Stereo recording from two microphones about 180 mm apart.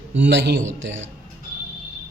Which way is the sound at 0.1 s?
75° right (ahead or behind).